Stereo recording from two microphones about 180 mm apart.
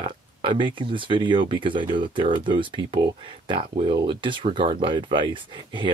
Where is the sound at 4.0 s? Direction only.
25° right (ahead or behind).